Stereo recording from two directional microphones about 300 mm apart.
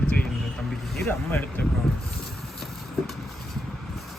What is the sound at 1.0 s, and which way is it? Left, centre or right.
Speech, centre.